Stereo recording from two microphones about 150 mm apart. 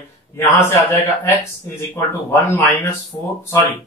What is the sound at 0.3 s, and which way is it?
A man's voice, 15° left (ahead or behind).